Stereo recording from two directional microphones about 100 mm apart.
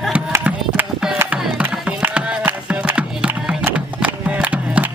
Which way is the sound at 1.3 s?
10° right (ahead or behind).